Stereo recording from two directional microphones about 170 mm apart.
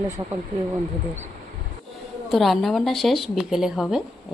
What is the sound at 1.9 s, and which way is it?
A woman's voice, centre (ahead or behind).